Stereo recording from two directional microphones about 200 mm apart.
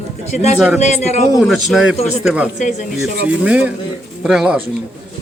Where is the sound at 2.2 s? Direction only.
5° right (ahead or behind).